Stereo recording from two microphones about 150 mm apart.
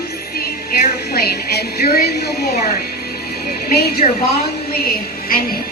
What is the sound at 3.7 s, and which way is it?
Speech, 90° left.